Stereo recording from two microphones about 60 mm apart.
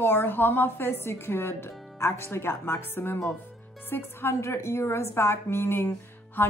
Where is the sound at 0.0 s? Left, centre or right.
Left.